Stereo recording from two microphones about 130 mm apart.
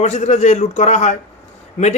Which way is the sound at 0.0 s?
60° left (ahead or behind).